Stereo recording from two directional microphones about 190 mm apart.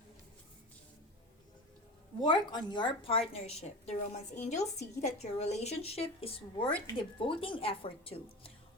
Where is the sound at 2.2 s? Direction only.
20° left (ahead or behind).